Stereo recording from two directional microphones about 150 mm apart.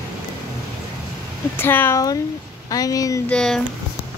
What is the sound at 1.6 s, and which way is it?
Child singing, 15° left (ahead or behind).